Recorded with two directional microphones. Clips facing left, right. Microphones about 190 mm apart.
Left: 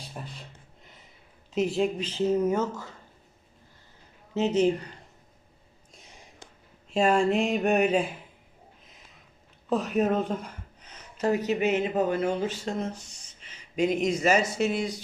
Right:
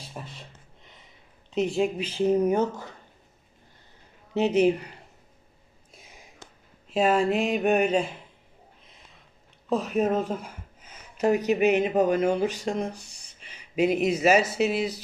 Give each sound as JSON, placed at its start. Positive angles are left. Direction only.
{"t": 0.0, "sound": "speech", "side_deg": 0}
{"t": 1.5, "sound": "a sound", "side_deg": 0}
{"t": 2.0, "sound": "speech", "side_deg": -10}
{"t": 4.4, "sound": "speech", "side_deg": -15}
{"t": 6.9, "sound": "a sound", "side_deg": 0}
{"t": 9.6, "sound": "speech", "side_deg": 0}